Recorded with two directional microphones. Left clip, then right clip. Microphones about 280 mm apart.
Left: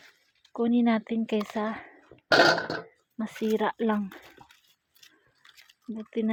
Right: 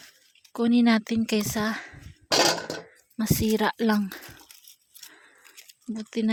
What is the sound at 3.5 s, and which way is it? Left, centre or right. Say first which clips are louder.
Speech: right 1 dB; right.